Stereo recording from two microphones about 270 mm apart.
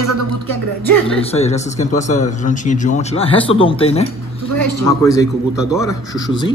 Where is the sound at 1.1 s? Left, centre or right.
Left.